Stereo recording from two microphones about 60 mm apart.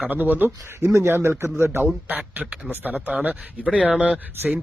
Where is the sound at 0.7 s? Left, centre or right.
Right.